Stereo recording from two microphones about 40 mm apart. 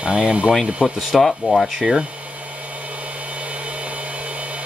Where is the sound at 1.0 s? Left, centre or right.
Centre.